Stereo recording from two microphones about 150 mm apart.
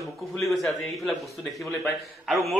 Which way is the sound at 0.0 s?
Centre (ahead or behind).